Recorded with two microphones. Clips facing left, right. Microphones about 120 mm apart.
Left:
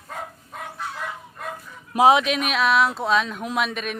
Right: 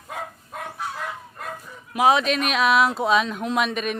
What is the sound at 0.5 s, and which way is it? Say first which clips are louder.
Chicken: right 2 dB; centre (ahead or behind).